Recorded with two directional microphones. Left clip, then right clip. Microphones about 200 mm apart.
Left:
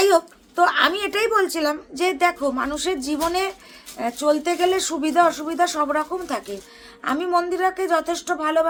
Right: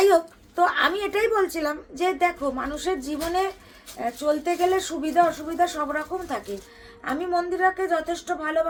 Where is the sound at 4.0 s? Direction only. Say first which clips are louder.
Left 4 dB; 20° left (ahead or behind).